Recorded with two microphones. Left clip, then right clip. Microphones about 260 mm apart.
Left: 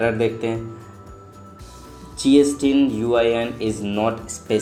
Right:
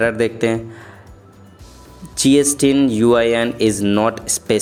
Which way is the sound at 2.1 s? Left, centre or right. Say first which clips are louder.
Right 1 dB; right.